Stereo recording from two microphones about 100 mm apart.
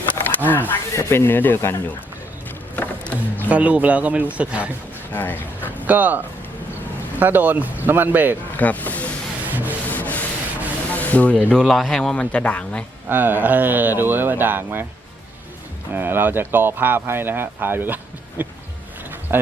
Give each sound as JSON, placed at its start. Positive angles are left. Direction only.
{"t": 0.2, "sound": "a sound", "side_deg": 20}
{"t": 0.7, "sound": "speech", "side_deg": 25}
{"t": 2.7, "sound": "music", "side_deg": 15}
{"t": 3.5, "sound": "a man's voice", "side_deg": -15}
{"t": 5.1, "sound": "speech", "side_deg": 20}
{"t": 5.7, "sound": "a man's voice", "side_deg": -15}
{"t": 8.5, "sound": "speech", "side_deg": 15}
{"t": 9.5, "sound": "rub", "side_deg": -15}
{"t": 9.9, "sound": "rub", "side_deg": 15}
{"t": 10.9, "sound": "speech", "side_deg": 15}
{"t": 11.7, "sound": "speech", "side_deg": 0}
{"t": 13.1, "sound": "speech", "side_deg": -20}
{"t": 16.0, "sound": "speech", "side_deg": -20}
{"t": 19.3, "sound": "a sound", "side_deg": -20}